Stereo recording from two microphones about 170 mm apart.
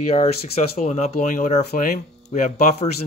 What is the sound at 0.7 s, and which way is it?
Speech, 40° left (ahead or behind).